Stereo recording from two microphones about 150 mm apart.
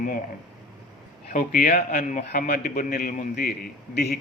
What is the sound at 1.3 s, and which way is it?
Speech, 70° left (ahead or behind).